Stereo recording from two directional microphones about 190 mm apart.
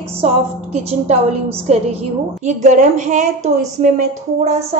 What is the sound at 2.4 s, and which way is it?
A woman's voice, 40° right (ahead or behind).